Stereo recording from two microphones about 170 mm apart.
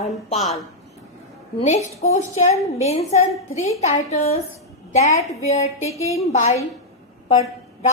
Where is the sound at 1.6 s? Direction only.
40° left (ahead or behind).